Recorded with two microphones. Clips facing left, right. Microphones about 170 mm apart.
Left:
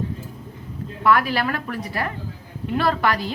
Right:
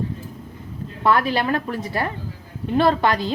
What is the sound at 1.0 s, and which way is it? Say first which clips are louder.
A woman's voice: even; 25° right (ahead or behind).